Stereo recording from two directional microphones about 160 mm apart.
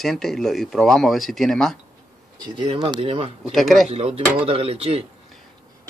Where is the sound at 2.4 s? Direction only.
30° right (ahead or behind).